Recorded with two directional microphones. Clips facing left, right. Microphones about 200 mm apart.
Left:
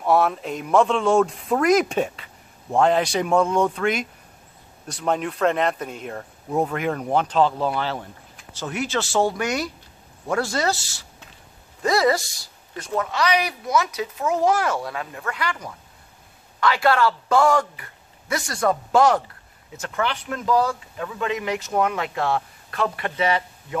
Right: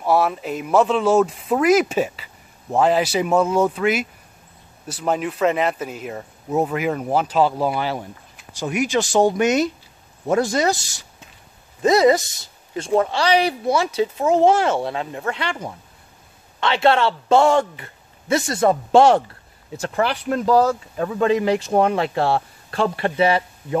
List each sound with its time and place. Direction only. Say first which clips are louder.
0.0 s a woman's voice: right 1 dB; centre (ahead or behind); by 23.8 s 30° right (ahead or behind)